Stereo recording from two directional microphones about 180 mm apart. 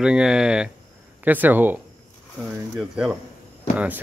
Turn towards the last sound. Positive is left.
turn(degrees=-10)  # may be behind; listen again after turning